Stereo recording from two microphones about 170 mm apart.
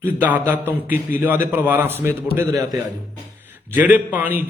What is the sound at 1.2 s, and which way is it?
A man's voice, 10° right (ahead or behind).